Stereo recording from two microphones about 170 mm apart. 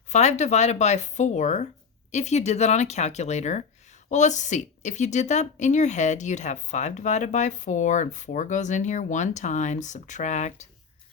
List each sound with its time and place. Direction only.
0.1 s a woman's voice: 40° left (ahead or behind)